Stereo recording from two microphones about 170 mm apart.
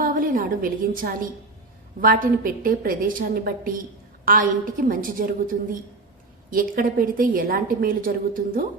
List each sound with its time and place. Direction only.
0.0 s a woman's voice: 55° right (ahead or behind)
6.5 s a woman's voice: 55° right (ahead or behind)